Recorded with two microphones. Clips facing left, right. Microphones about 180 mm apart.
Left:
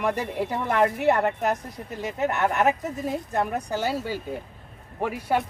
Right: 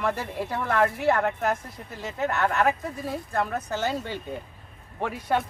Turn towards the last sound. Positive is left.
turn(degrees=5)  # may be behind; listen again after turning